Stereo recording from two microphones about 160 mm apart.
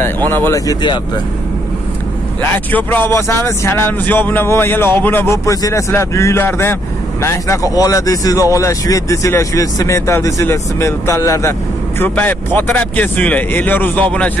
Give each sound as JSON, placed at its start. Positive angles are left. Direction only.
{"t": 0.4, "sound": "speech", "side_deg": 20}
{"t": 2.5, "sound": "speech", "side_deg": 10}